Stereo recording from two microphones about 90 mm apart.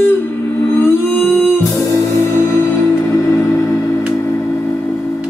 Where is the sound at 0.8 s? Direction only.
25° left (ahead or behind).